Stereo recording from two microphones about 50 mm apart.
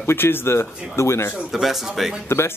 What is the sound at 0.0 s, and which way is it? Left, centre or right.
Speech, left.